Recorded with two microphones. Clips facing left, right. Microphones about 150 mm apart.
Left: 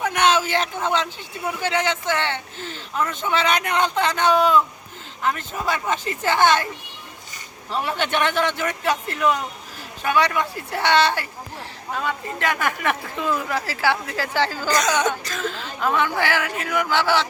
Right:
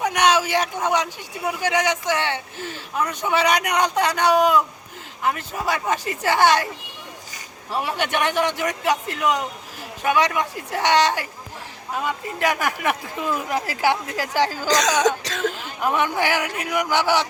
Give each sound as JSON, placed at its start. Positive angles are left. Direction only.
{"t": 0.0, "sound": "a sound", "side_deg": -15}
{"t": 1.5, "sound": "speech", "side_deg": -15}
{"t": 7.7, "sound": "speech", "side_deg": -10}
{"t": 15.0, "sound": "throat clearing", "side_deg": -75}
{"t": 15.4, "sound": "speech", "side_deg": -15}